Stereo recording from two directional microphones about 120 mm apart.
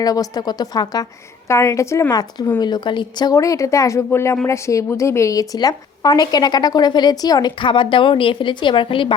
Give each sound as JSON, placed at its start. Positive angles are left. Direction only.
{"t": 0.0, "sound": "a woman's voice", "side_deg": 30}